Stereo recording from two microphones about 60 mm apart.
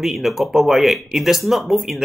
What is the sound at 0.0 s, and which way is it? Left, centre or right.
Speech, centre.